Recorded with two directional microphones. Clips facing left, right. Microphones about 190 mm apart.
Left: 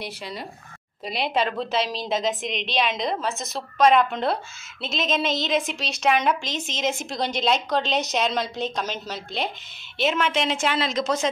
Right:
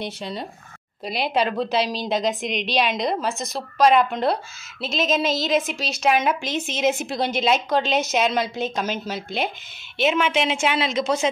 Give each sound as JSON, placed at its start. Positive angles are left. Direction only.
{"t": 0.0, "sound": "speech", "side_deg": -25}
{"t": 1.0, "sound": "a woman's voice", "side_deg": 0}